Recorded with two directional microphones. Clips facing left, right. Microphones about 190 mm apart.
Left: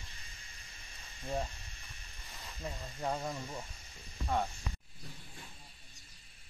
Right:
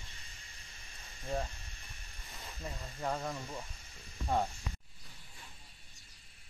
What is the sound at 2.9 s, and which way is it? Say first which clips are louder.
Speech: even; 15° left (ahead or behind).